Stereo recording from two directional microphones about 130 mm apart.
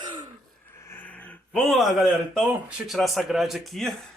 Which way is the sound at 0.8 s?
15° left (ahead or behind).